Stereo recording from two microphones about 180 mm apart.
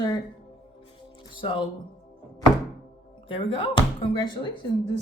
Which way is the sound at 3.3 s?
30° left (ahead or behind).